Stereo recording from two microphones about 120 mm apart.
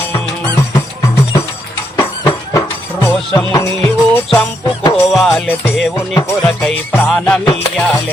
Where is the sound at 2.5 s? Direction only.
25° left (ahead or behind).